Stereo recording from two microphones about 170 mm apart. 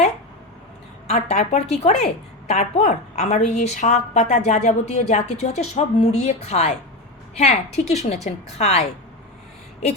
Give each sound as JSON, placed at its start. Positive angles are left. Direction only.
{"t": 1.0, "sound": "a woman's voice", "side_deg": 40}